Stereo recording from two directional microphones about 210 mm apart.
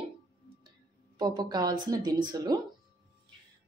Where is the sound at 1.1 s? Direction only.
20° right (ahead or behind).